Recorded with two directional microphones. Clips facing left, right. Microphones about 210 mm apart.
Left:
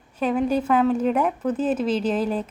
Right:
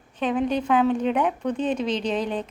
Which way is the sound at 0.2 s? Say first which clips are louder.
Left 2 dB; 5° left (ahead or behind).